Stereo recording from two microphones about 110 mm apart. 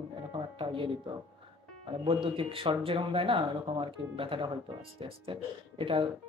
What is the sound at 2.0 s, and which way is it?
Speech, 55° right (ahead or behind).